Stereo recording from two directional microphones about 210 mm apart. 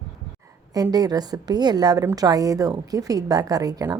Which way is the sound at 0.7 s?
20° right (ahead or behind).